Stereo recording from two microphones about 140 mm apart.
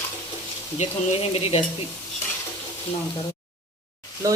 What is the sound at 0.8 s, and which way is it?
Speech, 45° left (ahead or behind).